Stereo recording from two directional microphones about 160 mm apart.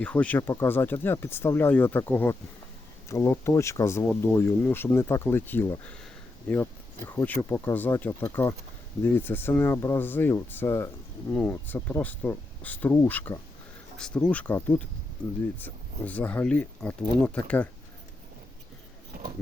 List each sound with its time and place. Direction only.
0.0 s speech: 10° left (ahead or behind)